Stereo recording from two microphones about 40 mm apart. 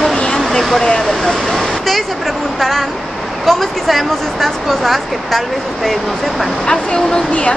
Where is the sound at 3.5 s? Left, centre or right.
Centre.